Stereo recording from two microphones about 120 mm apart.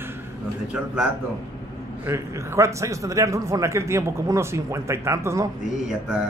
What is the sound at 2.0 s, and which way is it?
A man's voice, 20° right (ahead or behind).